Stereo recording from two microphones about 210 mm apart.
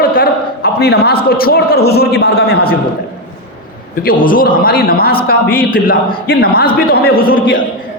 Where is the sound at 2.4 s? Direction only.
45° left (ahead or behind).